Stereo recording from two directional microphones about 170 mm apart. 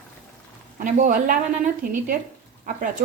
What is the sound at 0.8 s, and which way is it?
Speech, 50° right (ahead or behind).